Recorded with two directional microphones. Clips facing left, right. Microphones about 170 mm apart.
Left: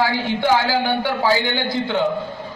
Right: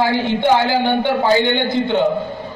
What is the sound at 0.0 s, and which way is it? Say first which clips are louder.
A man's voice: right 3 dB; 20° right (ahead or behind).